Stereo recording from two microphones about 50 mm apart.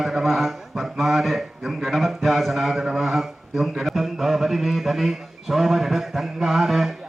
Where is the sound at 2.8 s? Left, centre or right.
Centre.